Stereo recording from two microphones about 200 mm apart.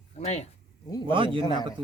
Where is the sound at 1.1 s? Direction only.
25° right (ahead or behind).